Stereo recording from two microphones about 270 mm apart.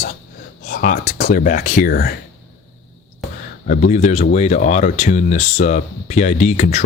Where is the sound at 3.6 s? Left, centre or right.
Left.